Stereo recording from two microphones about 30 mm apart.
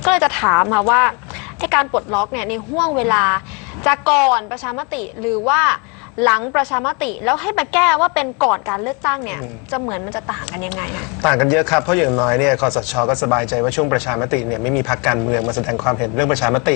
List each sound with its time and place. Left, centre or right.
0.0 s a woman's voice: centre